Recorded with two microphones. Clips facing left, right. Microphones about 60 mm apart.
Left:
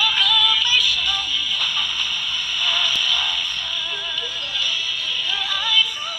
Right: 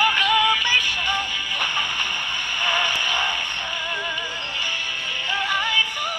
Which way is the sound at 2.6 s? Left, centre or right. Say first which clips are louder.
Right 1 dB; right.